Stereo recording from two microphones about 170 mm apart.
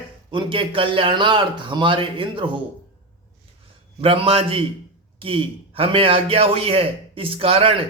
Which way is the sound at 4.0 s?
35° right (ahead or behind).